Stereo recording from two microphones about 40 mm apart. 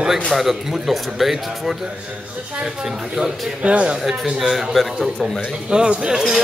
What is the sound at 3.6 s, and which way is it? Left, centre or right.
Speech, right.